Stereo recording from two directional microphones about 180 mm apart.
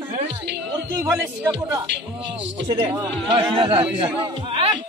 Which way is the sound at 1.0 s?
15° right (ahead or behind).